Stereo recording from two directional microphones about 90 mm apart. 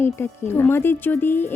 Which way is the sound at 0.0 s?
25° left (ahead or behind).